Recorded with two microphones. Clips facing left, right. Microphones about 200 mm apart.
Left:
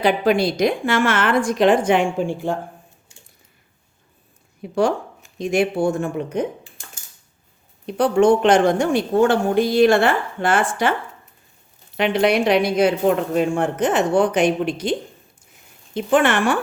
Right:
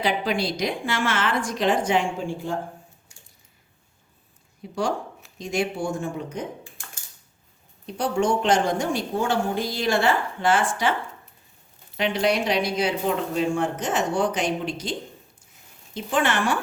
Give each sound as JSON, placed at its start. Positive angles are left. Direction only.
{"t": 0.0, "sound": "a woman's voice", "side_deg": 55}
{"t": 4.6, "sound": "a woman's voice", "side_deg": 60}
{"t": 7.9, "sound": "a woman's voice", "side_deg": 60}
{"t": 11.9, "sound": "a woman's voice", "side_deg": 60}
{"t": 16.0, "sound": "a woman's voice", "side_deg": 60}